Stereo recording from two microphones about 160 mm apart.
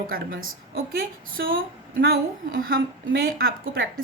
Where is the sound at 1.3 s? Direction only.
65° right (ahead or behind).